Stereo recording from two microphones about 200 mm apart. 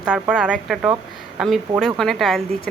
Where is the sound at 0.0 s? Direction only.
5° right (ahead or behind).